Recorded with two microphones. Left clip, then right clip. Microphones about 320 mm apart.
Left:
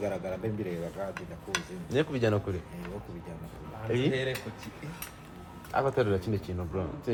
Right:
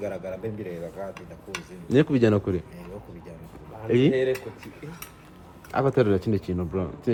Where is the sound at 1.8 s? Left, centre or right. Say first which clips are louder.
Right 9 dB; right.